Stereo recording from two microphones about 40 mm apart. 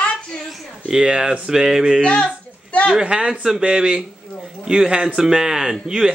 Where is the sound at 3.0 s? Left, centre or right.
Right.